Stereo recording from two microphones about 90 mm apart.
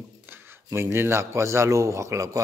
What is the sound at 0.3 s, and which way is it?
Speech, 30° right (ahead or behind).